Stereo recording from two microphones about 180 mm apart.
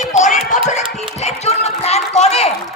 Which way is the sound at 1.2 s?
35° left (ahead or behind).